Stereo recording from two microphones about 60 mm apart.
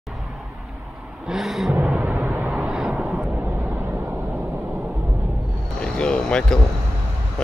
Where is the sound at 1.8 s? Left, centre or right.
Right.